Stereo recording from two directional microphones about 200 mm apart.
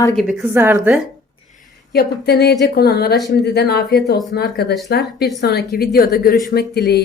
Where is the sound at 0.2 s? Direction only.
Centre (ahead or behind).